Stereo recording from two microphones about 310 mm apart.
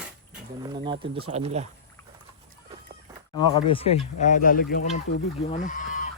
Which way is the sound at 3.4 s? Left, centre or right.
Centre.